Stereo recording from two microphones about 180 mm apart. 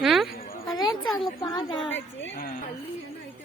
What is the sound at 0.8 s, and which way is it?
A woman's voice, 25° left (ahead or behind).